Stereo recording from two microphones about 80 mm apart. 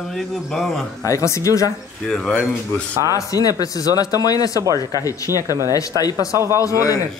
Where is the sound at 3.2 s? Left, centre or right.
Left.